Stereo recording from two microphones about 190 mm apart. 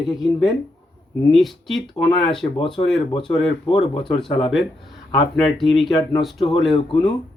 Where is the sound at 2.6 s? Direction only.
25° left (ahead or behind).